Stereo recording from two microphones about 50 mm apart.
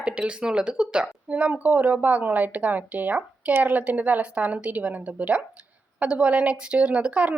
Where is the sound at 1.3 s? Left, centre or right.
Right.